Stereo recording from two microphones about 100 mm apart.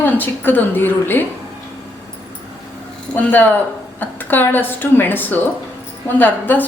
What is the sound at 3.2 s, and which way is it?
A woman's voice, 15° left (ahead or behind).